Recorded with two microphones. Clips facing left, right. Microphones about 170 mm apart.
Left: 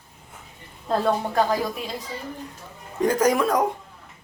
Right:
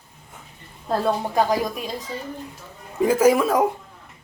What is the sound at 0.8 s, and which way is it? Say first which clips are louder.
Speech: even; 10° right (ahead or behind).